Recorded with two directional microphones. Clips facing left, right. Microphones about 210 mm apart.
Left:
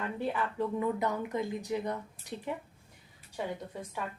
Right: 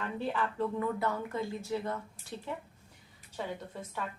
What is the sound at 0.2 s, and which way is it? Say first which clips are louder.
Speech: even; 15° left (ahead or behind).